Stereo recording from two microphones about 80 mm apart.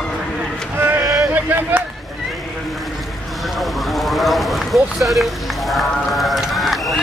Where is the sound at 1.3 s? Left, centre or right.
Right.